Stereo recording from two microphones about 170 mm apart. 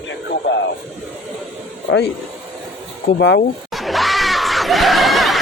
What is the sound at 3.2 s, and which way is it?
Speech, 90° left.